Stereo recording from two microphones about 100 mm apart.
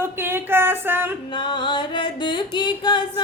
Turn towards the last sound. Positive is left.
turn(degrees=50)  # may be behind; listen again after turning